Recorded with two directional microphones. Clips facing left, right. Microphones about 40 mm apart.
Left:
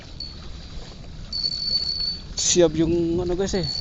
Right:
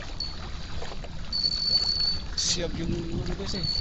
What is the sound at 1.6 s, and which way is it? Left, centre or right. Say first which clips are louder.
Vehicle: right 1 dB; centre.